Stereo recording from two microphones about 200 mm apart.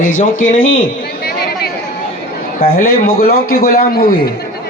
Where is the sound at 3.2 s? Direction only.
45° left (ahead or behind).